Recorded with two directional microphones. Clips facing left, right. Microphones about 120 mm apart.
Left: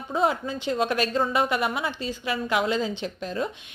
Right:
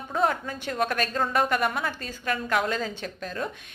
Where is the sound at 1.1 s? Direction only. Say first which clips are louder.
Left 1 dB; 5° left (ahead or behind).